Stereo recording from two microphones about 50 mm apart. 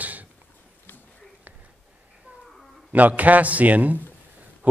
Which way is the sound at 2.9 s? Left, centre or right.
Right.